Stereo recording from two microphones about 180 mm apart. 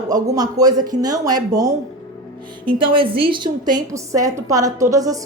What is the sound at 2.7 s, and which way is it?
A woman's voice, 30° right (ahead or behind).